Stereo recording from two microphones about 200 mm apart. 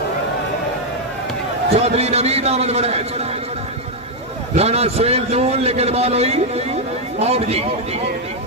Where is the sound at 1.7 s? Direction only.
30° right (ahead or behind).